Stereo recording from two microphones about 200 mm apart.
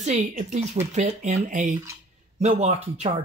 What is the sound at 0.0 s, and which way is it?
Speech, 40° right (ahead or behind).